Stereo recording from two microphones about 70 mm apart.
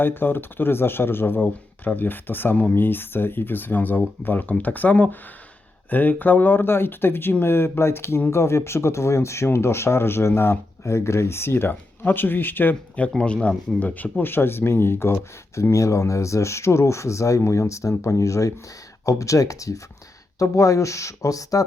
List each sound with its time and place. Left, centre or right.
0.0 s speech: left
13.1 s speech: centre; by 15.7 s left
15.7 s speech: left